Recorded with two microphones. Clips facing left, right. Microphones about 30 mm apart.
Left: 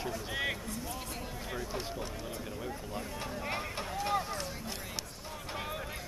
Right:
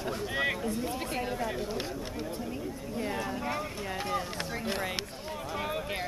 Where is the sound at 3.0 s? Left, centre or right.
Right.